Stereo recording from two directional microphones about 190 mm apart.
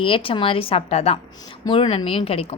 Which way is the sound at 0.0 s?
30° left (ahead or behind).